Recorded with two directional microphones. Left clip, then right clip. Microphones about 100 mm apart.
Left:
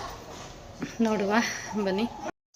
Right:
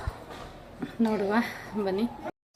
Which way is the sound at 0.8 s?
5° right (ahead or behind).